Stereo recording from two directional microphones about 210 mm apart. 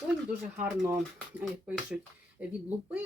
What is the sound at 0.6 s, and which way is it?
Speech, 10° right (ahead or behind).